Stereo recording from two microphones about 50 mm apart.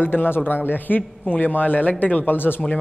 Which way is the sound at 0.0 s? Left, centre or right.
Left.